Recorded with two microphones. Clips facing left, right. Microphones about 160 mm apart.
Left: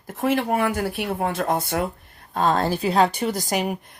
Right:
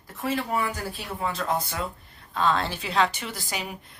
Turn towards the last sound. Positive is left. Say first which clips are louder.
# left 10 dB
turn(degrees=50)  # may be behind; listen again after turning